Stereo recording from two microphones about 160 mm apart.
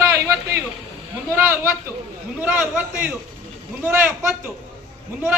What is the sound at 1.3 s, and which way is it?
A man's voice, 10° right (ahead or behind).